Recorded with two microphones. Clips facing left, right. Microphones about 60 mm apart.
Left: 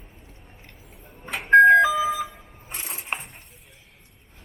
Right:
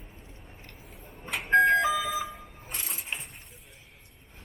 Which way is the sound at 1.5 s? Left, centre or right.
Left.